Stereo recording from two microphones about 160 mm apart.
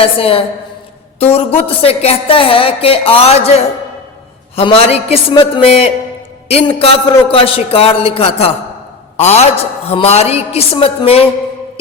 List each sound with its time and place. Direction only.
0.0 s a woman's voice: 35° left (ahead or behind)